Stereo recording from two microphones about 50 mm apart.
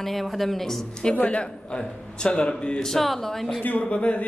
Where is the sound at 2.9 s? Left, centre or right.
Centre.